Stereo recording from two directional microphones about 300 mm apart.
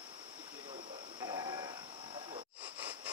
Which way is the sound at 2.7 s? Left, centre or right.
Centre.